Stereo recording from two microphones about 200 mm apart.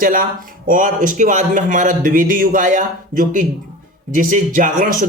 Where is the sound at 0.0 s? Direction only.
45° right (ahead or behind).